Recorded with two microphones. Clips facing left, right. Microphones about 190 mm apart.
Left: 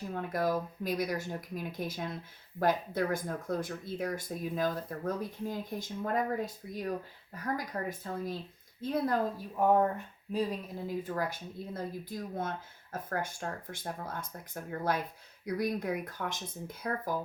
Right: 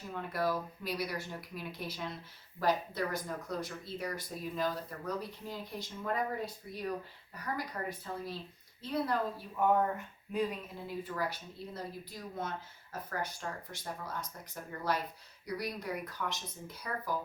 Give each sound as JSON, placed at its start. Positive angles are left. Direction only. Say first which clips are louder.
{"t": 0.1, "sound": "speech", "louder": "left 2 dB", "side_deg": 45}